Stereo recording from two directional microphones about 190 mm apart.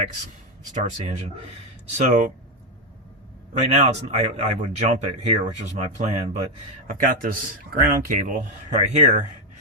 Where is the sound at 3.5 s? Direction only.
35° right (ahead or behind).